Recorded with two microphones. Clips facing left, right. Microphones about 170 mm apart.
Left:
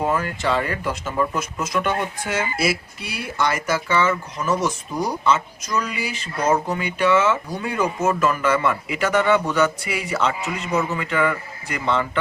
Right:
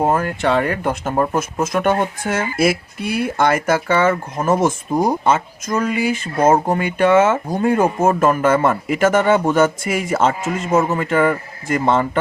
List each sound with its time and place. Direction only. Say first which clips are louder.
0.0 s speech: right 5 dB; 50° right (ahead or behind)